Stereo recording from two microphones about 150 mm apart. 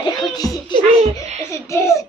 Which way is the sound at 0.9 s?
50° right (ahead or behind).